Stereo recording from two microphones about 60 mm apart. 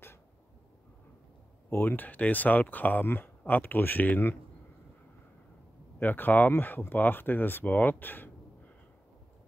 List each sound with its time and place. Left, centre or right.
1.8 s speech: left
5.9 s speech: left